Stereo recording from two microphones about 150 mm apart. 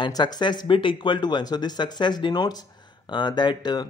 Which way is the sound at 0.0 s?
30° left (ahead or behind).